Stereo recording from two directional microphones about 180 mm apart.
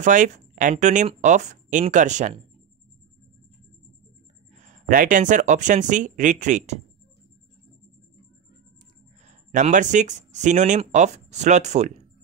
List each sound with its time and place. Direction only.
0.0 s speech: 45° right (ahead or behind)
4.6 s speech: 45° right (ahead or behind)
9.5 s speech: 45° right (ahead or behind)